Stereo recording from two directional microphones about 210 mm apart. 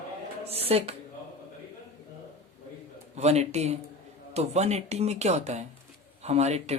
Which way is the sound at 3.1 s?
30° right (ahead or behind).